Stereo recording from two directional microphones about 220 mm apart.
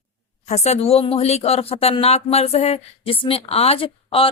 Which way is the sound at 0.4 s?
30° left (ahead or behind).